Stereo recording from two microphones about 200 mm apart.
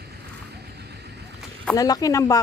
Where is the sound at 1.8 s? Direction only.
20° left (ahead or behind).